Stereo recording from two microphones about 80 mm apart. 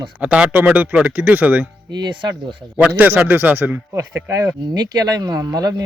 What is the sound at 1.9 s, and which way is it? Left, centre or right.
Speech, right.